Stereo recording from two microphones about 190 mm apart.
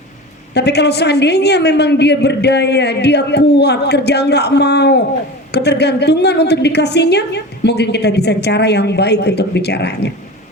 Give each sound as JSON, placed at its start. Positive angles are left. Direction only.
{"t": 0.5, "sound": "a woman's voice", "side_deg": 60}